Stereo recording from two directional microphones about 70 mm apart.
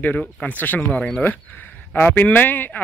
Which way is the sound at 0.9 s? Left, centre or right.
Centre.